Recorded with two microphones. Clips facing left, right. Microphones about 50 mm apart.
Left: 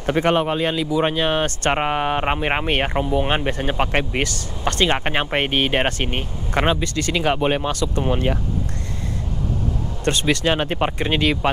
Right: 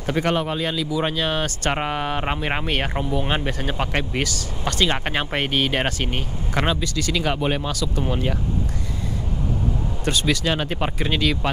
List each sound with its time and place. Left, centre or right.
0.0 s speech: left
4.2 s speech: centre
4.8 s speech: left
10.1 s speech: centre